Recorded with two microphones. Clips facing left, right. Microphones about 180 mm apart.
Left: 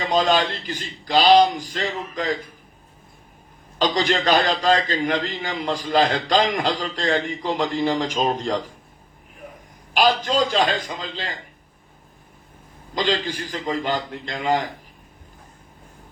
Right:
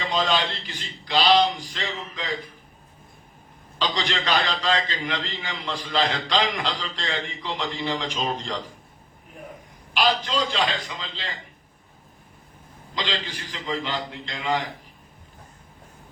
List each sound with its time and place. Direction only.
0.0 s a man's voice: 45° left (ahead or behind)
3.8 s a man's voice: 45° left (ahead or behind)
9.9 s a man's voice: 45° left (ahead or behind)
12.9 s a man's voice: 45° left (ahead or behind)